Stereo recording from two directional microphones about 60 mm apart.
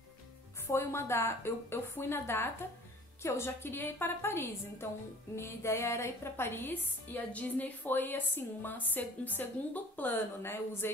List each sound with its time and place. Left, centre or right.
0.7 s a woman's voice: left